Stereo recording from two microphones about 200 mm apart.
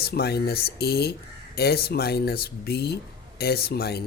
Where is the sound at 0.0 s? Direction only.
50° left (ahead or behind).